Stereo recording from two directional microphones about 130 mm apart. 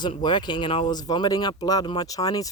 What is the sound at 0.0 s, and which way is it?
Speech, 35° left (ahead or behind).